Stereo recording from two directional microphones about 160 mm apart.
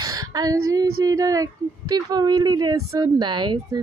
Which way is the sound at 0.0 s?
25° right (ahead or behind).